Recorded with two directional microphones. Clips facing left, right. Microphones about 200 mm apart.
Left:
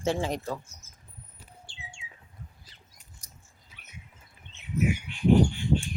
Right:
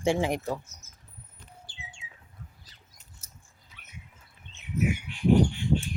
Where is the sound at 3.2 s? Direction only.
15° left (ahead or behind).